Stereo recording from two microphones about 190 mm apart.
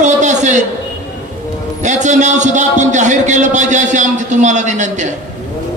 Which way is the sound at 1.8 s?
40° right (ahead or behind).